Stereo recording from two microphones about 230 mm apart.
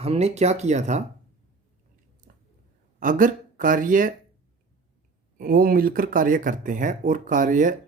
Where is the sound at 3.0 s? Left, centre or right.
Right.